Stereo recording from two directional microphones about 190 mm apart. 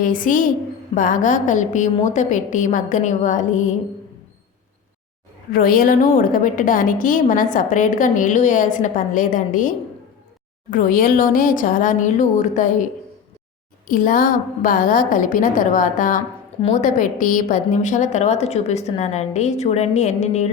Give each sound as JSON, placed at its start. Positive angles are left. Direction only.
{"t": 0.0, "sound": "a woman's voice", "side_deg": 45}
{"t": 5.5, "sound": "a woman's voice", "side_deg": 50}
{"t": 13.8, "sound": "a woman's voice", "side_deg": 50}